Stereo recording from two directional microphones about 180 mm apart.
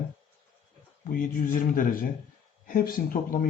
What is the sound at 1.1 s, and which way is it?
Speech, 50° left (ahead or behind).